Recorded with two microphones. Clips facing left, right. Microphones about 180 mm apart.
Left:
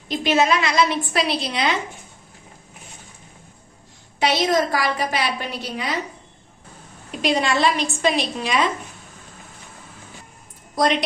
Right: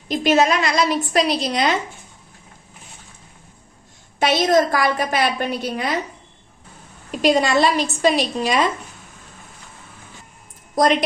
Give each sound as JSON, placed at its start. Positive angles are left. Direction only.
{"t": 0.1, "sound": "a woman's voice", "side_deg": -45}
{"t": 4.2, "sound": "a woman's voice", "side_deg": -45}
{"t": 7.2, "sound": "a woman's voice", "side_deg": -45}